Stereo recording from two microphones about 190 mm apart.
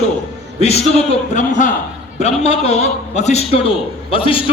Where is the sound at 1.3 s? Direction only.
40° left (ahead or behind).